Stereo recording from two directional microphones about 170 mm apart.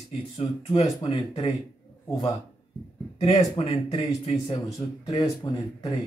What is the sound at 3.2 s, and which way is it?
Speech, 40° left (ahead or behind).